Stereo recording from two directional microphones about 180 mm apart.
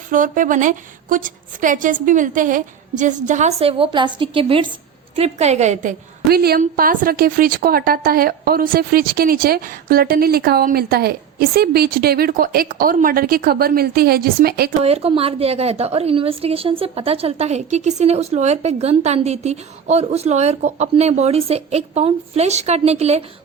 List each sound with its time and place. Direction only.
0.1 s a woman's voice: 45° right (ahead or behind)
6.2 s a woman's voice: 60° right (ahead or behind)
14.8 s a woman's voice: 35° right (ahead or behind)